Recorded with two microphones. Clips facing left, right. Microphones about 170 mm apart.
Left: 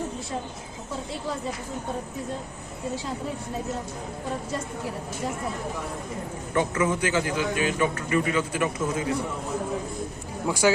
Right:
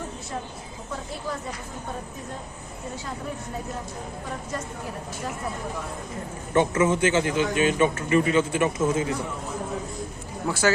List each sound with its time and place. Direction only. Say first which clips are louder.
6.5 s speech: right 4 dB; 25° right (ahead or behind)
10.4 s speech: left 1 dB; 10° left (ahead or behind)